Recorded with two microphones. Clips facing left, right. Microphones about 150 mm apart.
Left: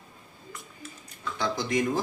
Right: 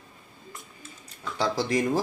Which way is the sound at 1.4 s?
30° right (ahead or behind).